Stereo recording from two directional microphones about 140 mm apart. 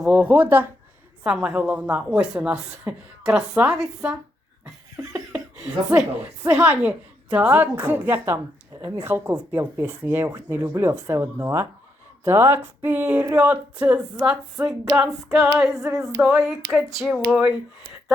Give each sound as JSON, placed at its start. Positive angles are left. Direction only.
{"t": 0.0, "sound": "a woman's voice", "side_deg": -10}
{"t": 16.5, "sound": "a woman's voice", "side_deg": -5}